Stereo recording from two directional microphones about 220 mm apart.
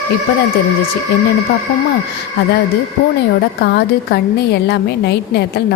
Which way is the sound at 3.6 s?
50° left (ahead or behind).